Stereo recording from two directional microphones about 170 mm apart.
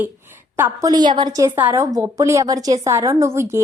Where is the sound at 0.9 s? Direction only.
25° right (ahead or behind).